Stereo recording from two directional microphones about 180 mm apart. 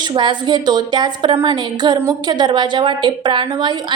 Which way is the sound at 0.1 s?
25° right (ahead or behind).